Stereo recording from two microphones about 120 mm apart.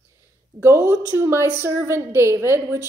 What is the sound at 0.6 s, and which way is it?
A woman's voice, 20° right (ahead or behind).